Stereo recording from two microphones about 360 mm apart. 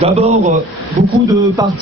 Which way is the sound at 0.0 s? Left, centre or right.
Centre.